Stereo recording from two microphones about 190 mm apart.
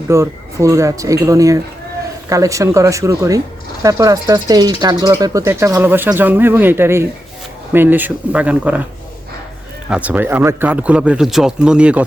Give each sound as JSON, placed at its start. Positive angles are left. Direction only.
{"t": 0.1, "sound": "a man's voice", "side_deg": -15}
{"t": 9.9, "sound": "a man's voice", "side_deg": -10}